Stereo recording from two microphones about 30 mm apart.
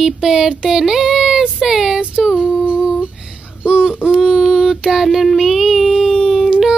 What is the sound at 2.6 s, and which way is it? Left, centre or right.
Humming, right.